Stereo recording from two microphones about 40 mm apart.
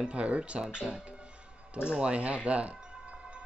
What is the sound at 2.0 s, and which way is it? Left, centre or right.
Speech, right.